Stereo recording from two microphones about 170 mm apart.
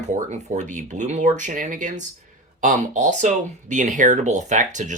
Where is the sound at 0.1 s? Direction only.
45° right (ahead or behind).